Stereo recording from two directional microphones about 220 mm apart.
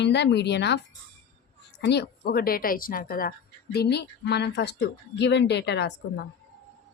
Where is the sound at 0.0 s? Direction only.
50° left (ahead or behind).